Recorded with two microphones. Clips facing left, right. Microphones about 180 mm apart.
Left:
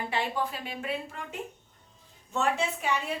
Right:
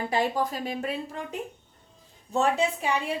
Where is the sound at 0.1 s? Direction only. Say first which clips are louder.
Right 6 dB; 40° right (ahead or behind).